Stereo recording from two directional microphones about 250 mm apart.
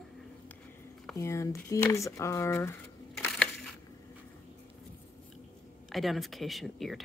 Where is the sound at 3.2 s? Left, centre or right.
Centre.